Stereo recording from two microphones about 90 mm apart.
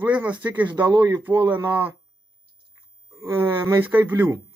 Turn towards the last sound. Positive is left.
turn(degrees=-25)  # may be behind; listen again after turning